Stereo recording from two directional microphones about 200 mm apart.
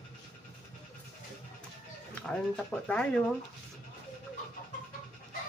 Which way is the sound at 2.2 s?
5° left (ahead or behind).